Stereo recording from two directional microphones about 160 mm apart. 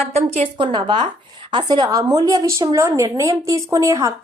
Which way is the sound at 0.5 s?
30° right (ahead or behind).